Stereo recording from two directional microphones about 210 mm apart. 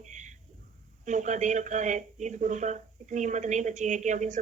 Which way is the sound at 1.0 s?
35° right (ahead or behind).